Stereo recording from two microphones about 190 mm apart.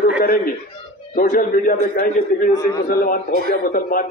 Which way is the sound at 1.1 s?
50° left (ahead or behind).